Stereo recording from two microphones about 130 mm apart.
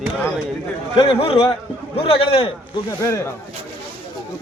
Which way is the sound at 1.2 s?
45° left (ahead or behind).